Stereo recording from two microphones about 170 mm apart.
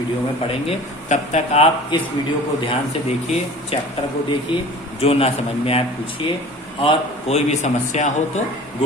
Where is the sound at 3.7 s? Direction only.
35° left (ahead or behind).